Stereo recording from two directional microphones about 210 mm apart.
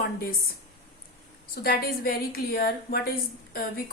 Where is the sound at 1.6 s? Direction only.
45° left (ahead or behind).